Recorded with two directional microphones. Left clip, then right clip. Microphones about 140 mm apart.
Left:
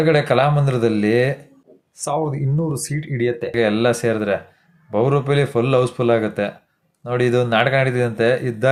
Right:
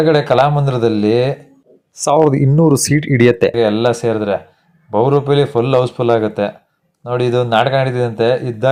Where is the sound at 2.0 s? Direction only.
55° right (ahead or behind).